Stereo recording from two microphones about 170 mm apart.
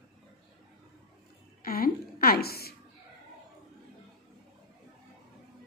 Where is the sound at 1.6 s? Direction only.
60° left (ahead or behind).